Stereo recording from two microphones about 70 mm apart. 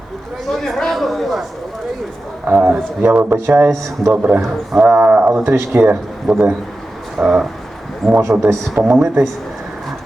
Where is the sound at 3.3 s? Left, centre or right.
Right.